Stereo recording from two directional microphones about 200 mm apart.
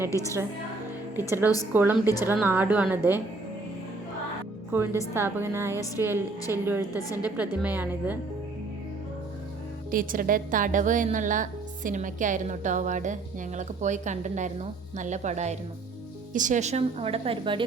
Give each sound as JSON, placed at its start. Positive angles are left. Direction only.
{"t": 0.1, "sound": "a woman's voice", "side_deg": 15}
{"t": 1.7, "sound": "a woman's voice", "side_deg": -10}
{"t": 4.7, "sound": "a woman's voice", "side_deg": -10}
{"t": 9.9, "sound": "a woman's voice", "side_deg": -45}